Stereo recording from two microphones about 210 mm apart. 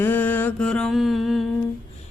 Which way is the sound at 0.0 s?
10° left (ahead or behind).